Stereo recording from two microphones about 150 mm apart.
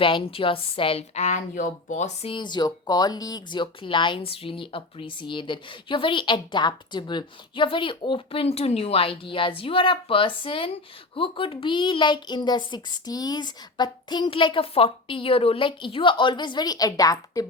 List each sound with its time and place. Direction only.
0.0 s speech: 35° left (ahead or behind)
2.3 s speech: 30° left (ahead or behind)